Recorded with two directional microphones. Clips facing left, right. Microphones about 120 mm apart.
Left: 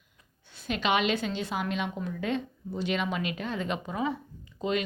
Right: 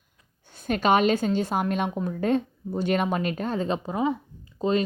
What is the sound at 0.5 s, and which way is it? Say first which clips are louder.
A woman's voice: right 6 dB; 45° right (ahead or behind).